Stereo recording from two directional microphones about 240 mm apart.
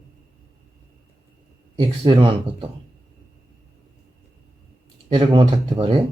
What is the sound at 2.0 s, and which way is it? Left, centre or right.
Speech, centre.